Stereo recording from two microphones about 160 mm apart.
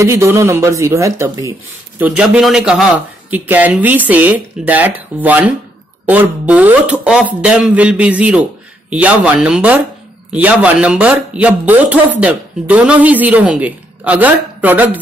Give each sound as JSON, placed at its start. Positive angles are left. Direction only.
{"t": 0.0, "sound": "speech", "side_deg": -20}
{"t": 2.0, "sound": "speech", "side_deg": -10}